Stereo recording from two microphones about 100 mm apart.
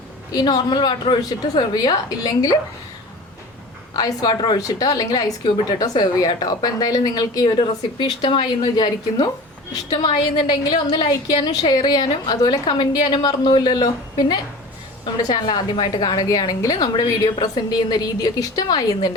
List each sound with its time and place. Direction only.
0.3 s a woman's voice: 40° left (ahead or behind)
3.9 s a woman's voice: 45° left (ahead or behind); by 8.4 s 60° left (ahead or behind)
8.7 s a woman's voice: 40° left (ahead or behind)